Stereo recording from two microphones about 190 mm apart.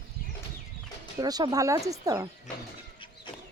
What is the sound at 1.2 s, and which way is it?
Speech, 20° right (ahead or behind).